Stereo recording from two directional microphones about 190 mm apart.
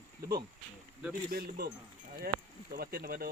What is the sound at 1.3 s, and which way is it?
Speech, 55° right (ahead or behind).